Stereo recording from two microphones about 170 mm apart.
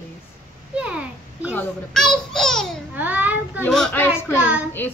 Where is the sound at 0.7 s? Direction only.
5° right (ahead or behind).